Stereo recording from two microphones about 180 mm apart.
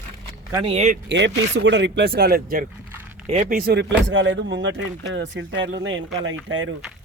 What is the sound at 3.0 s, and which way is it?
Typing, 10° right (ahead or behind).